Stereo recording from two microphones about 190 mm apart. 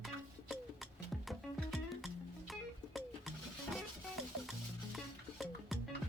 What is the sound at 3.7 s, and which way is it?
Stir, centre (ahead or behind).